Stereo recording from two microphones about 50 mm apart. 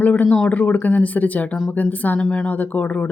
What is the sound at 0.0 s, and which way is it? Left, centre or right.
Speech, left.